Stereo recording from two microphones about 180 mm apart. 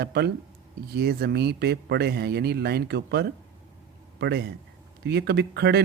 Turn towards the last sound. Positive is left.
turn(degrees=-65)  # may be behind; listen again after turning